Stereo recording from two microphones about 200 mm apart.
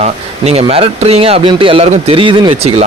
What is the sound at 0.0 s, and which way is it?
Speech, 30° right (ahead or behind).